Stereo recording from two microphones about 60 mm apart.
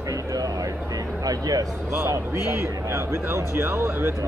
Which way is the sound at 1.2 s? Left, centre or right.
Right.